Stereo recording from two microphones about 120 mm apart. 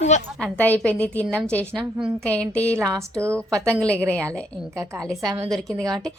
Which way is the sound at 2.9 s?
25° right (ahead or behind).